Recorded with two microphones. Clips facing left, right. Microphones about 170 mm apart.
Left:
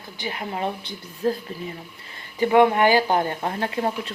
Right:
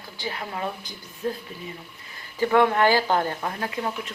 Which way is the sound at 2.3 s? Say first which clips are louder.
Left 3 dB; 15° left (ahead or behind).